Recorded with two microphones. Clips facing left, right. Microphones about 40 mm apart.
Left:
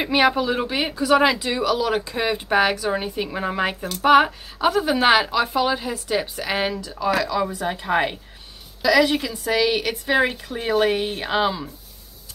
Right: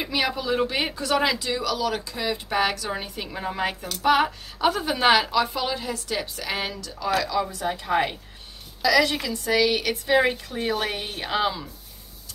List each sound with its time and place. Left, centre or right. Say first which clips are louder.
0.0 s speech: left 7 dB; left
0.5 s speech: left 1 dB; centre
4.6 s a woman's voice: left 4 dB; centre
7.4 s a woman's voice: left 3 dB; left